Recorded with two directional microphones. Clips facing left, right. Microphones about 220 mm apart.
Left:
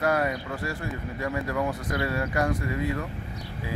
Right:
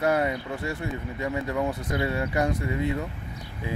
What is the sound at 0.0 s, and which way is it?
Speech, 25° right (ahead or behind).